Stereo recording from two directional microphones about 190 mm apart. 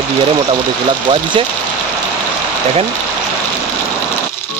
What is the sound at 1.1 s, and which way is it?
Speech, 25° right (ahead or behind).